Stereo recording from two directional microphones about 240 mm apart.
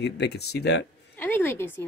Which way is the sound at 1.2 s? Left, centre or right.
Centre.